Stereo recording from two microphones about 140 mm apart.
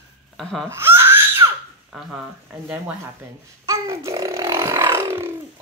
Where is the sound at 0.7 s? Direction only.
15° right (ahead or behind).